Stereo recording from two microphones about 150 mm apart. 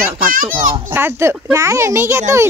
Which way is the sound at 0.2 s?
65° right (ahead or behind).